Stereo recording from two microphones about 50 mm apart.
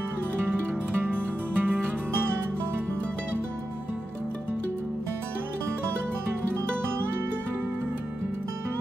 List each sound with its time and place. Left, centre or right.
0.9 s music: right